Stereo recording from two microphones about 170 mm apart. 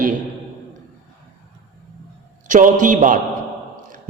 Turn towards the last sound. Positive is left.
turn(degrees=-50)  # may be behind; listen again after turning